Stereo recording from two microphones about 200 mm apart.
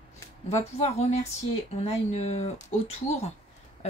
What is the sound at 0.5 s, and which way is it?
Speech, 30° left (ahead or behind).